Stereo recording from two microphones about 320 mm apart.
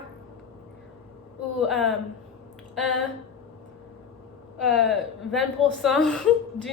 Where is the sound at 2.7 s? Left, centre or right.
Centre.